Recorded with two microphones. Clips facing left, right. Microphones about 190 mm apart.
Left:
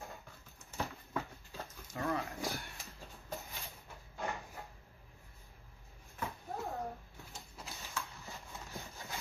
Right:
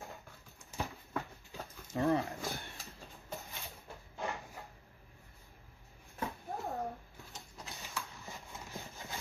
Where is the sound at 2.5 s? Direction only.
15° right (ahead or behind).